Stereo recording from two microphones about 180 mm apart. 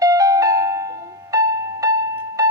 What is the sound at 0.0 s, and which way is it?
Music, 20° right (ahead or behind).